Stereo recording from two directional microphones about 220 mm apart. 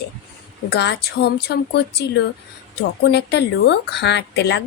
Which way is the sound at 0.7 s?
50° left (ahead or behind).